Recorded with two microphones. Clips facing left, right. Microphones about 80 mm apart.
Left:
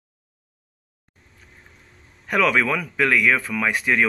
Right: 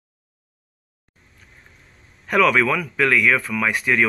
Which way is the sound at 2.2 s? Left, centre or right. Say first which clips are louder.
Right 3 dB; centre.